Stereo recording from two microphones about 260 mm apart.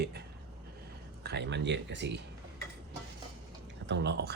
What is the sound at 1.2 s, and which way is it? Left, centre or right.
Speech, right.